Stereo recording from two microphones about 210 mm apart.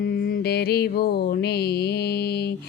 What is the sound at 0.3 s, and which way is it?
Mantra, 50° left (ahead or behind).